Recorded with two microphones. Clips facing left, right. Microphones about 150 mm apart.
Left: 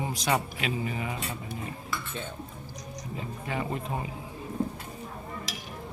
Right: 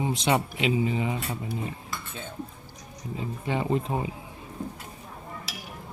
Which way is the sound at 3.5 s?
25° right (ahead or behind).